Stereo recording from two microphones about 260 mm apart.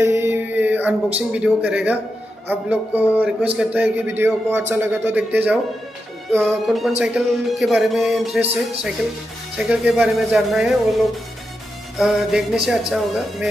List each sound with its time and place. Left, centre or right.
0.0 s a sound: centre
2.7 s a man's voice: centre
9.6 s speech: centre
12.0 s speech: centre